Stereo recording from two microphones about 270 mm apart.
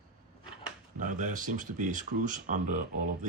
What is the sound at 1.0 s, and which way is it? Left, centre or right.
Speech, right.